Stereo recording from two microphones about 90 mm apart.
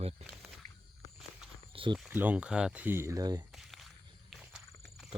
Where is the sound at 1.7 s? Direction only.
75° right (ahead or behind).